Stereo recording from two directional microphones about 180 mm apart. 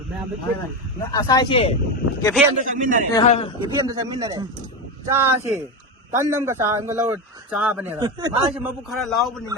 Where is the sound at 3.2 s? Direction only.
35° left (ahead or behind).